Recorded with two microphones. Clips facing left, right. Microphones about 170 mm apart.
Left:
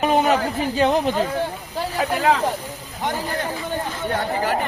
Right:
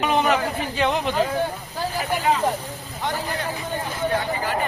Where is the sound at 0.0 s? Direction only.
40° left (ahead or behind).